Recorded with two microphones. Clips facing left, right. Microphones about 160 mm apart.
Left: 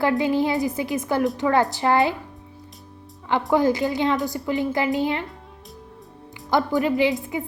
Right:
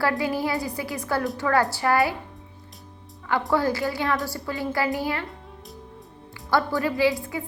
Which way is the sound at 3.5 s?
20° left (ahead or behind).